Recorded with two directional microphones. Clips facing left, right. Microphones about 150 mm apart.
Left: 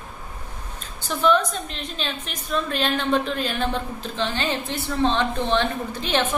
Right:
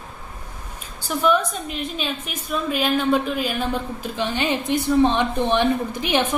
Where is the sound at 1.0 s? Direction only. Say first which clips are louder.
Even; 10° right (ahead or behind).